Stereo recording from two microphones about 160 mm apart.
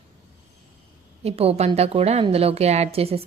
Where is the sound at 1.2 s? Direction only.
40° right (ahead or behind).